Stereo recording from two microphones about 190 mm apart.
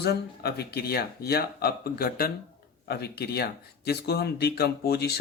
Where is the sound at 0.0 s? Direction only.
55° left (ahead or behind).